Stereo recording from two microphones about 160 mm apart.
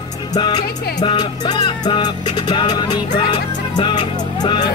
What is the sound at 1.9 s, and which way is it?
Speech, 30° left (ahead or behind).